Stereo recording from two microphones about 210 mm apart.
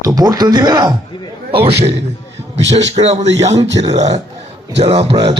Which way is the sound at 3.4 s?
15° right (ahead or behind).